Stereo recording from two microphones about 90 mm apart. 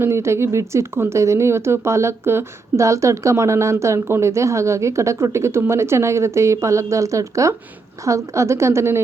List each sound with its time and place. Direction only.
0.0 s speech: 30° right (ahead or behind)